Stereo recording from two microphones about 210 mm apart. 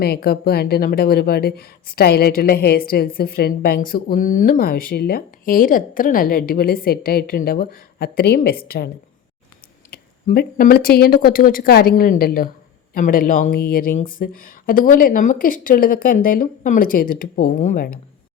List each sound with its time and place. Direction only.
0.0 s speech: 45° left (ahead or behind)
9.9 s speech: 45° left (ahead or behind)